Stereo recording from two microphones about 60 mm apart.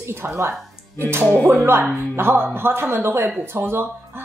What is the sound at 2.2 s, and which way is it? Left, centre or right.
Speech, right.